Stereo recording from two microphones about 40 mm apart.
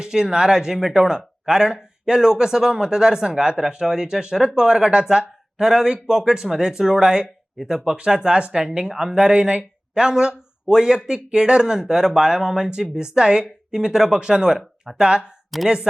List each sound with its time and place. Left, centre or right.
0.0 s speech: centre
1.0 s speech: centre
8.7 s speech: centre